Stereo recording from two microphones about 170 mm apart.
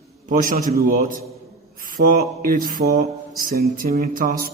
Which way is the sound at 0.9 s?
55° right (ahead or behind).